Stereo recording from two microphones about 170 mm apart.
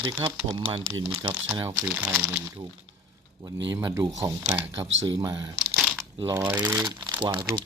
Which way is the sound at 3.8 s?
25° right (ahead or behind).